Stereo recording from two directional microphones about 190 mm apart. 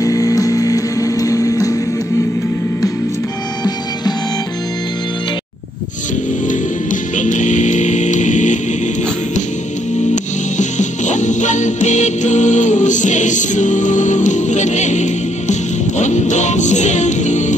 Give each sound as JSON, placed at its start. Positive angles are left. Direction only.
{"t": 0.0, "sound": "music", "side_deg": 20}
{"t": 6.4, "sound": "music", "side_deg": 40}
{"t": 10.1, "sound": "music", "side_deg": 40}